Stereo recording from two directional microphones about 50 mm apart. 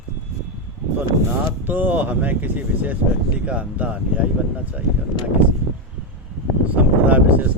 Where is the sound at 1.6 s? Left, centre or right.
Right.